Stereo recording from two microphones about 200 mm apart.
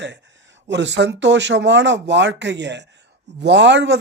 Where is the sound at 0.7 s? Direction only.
60° right (ahead or behind).